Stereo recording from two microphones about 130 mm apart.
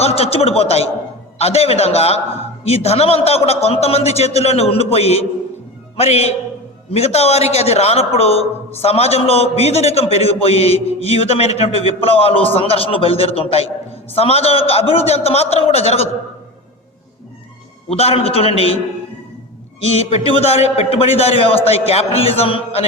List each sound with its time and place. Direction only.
0.0 s a man's voice: 50° left (ahead or behind)
17.8 s a man's voice: 50° left (ahead or behind)
19.9 s a man's voice: 50° left (ahead or behind)